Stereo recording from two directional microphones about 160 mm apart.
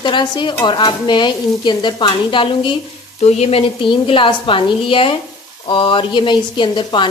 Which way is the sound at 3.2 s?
40° left (ahead or behind).